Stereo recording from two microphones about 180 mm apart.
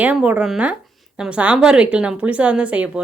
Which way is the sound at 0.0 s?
10° right (ahead or behind).